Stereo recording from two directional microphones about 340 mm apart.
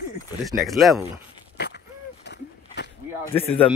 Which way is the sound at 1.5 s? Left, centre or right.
Left.